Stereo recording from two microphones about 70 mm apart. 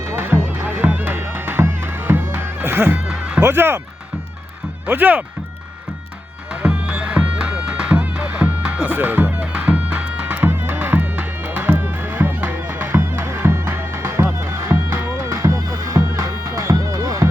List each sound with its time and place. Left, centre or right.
0.2 s music: right
3.4 s speech: right
4.9 s speech: right
6.5 s music: centre; by 17.2 s right